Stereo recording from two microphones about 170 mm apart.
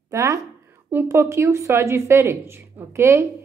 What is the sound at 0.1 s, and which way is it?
A woman's voice, 20° right (ahead or behind).